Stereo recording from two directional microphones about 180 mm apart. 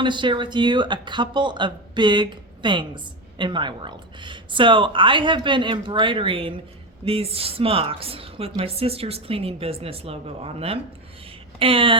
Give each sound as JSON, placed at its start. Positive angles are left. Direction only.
{"t": 0.0, "sound": "speech", "side_deg": -25}